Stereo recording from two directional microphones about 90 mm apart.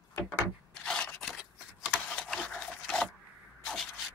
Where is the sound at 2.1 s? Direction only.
5° left (ahead or behind).